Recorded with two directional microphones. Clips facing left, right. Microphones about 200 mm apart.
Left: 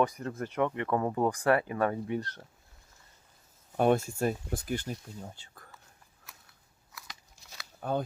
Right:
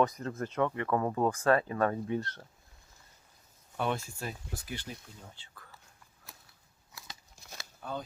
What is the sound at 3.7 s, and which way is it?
Speech, 45° left (ahead or behind).